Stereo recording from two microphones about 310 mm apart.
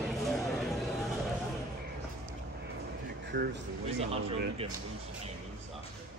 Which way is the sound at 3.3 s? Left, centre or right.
Right.